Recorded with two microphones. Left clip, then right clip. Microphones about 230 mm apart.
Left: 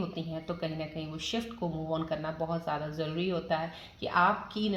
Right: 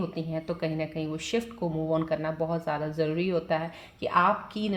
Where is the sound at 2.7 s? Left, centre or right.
Right.